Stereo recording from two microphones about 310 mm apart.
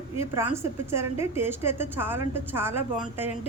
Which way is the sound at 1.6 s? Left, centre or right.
Centre.